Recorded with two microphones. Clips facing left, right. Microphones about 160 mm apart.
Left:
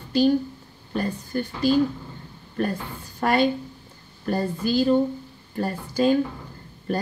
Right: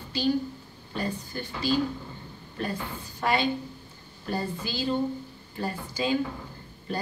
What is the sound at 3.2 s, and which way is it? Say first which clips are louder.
A woman's voice: left 5 dB; 50° left (ahead or behind).